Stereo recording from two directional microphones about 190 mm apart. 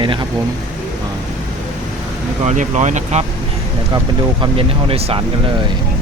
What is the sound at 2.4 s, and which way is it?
Speech, 40° right (ahead or behind).